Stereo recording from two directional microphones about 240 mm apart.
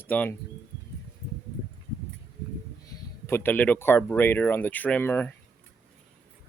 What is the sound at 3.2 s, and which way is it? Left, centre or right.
Speech, centre.